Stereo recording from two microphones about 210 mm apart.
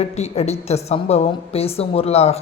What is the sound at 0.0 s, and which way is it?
A man's voice, 30° left (ahead or behind).